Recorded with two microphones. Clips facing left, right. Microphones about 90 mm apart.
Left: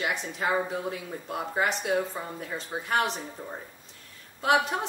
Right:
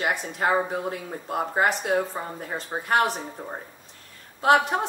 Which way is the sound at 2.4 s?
50° right (ahead or behind).